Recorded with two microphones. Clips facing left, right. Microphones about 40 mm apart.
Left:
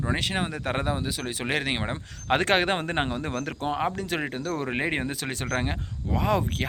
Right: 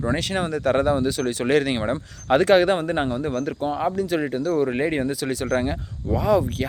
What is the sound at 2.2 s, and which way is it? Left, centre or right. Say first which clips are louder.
Speech: right 6 dB; left.